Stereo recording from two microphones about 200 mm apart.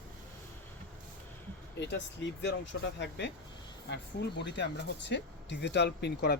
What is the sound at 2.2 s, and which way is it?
Speech, 65° left (ahead or behind).